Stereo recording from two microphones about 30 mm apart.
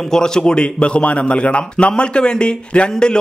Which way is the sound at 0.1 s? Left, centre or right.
Left.